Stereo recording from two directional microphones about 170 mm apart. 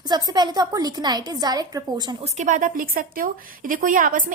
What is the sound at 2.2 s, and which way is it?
A woman's voice, 45° right (ahead or behind).